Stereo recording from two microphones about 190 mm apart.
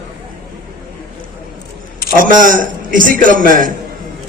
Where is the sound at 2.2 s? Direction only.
45° right (ahead or behind).